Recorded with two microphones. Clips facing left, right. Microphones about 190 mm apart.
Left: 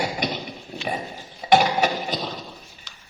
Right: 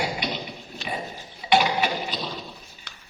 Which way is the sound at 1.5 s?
45° left (ahead or behind).